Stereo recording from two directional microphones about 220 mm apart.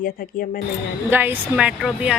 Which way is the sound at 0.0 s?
40° left (ahead or behind).